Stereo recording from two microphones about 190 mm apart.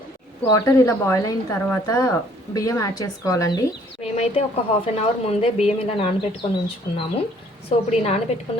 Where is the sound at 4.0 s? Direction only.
30° left (ahead or behind).